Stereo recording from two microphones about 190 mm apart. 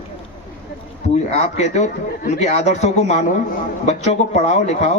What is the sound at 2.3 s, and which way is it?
A man's voice, 35° left (ahead or behind).